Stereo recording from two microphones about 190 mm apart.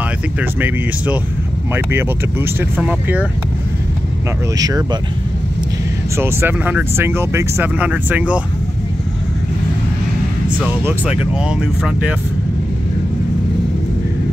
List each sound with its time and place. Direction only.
0.4 s speech: 10° right (ahead or behind)
4.6 s speech: 20° right (ahead or behind)
6.1 s speech: 10° right (ahead or behind)
10.6 s speech: 5° right (ahead or behind)